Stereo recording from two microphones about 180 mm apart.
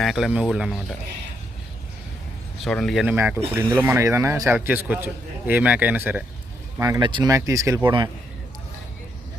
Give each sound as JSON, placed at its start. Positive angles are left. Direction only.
{"t": 0.0, "sound": "speech", "side_deg": 0}
{"t": 2.6, "sound": "speech", "side_deg": 5}
{"t": 3.2, "sound": "a man's voice", "side_deg": -10}